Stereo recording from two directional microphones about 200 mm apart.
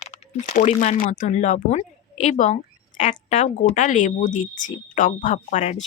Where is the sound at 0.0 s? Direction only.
35° left (ahead or behind).